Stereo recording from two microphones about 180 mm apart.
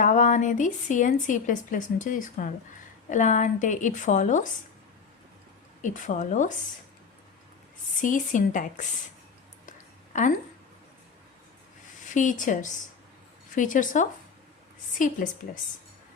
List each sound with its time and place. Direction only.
0.0 s speech: 45° left (ahead or behind)
5.8 s speech: 45° left (ahead or behind)
8.0 s speech: 45° left (ahead or behind)
9.6 s a sound: 45° left (ahead or behind)
12.0 s speech: 45° left (ahead or behind)